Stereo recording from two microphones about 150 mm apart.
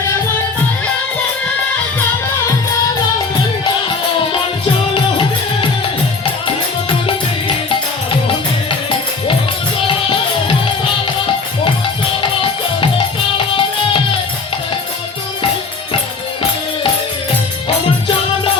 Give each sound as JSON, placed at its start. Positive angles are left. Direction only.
{"t": 7.1, "sound": "music", "side_deg": 35}
{"t": 12.2, "sound": "music", "side_deg": 35}